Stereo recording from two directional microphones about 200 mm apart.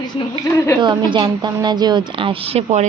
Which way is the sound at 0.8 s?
25° right (ahead or behind).